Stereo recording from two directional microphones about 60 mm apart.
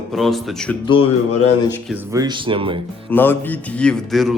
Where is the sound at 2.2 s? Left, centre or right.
Right.